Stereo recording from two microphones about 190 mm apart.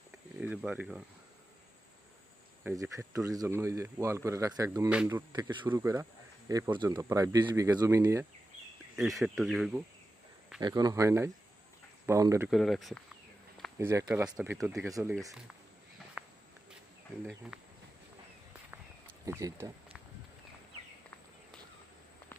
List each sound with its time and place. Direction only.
0.3 s speech: 5° right (ahead or behind)
2.6 s speech: 15° right (ahead or behind)
5.3 s speech: 25° right (ahead or behind)
9.0 s speech: centre (ahead or behind)
10.6 s speech: 20° right (ahead or behind)
12.5 s speech: centre (ahead or behind)
13.7 s speech: 15° right (ahead or behind)
14.6 s speech: centre (ahead or behind)
16.2 s walk: 5° right (ahead or behind)
17.5 s speech: 5° right (ahead or behind)
18.7 s a sound: 10° right (ahead or behind)